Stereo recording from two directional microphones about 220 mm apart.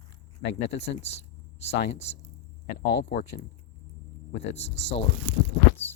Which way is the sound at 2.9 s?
50° left (ahead or behind).